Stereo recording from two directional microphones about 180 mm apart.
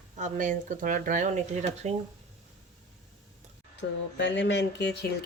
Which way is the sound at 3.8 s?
75° left (ahead or behind).